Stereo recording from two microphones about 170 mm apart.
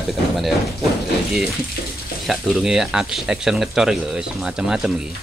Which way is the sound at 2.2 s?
Centre (ahead or behind).